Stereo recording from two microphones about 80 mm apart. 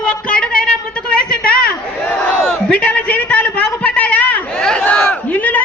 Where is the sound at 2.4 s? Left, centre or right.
Centre.